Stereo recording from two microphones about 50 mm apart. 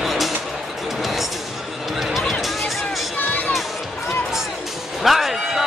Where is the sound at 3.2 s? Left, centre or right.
Left.